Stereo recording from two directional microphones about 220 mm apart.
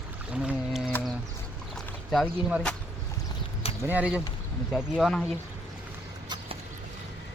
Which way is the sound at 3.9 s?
5° right (ahead or behind).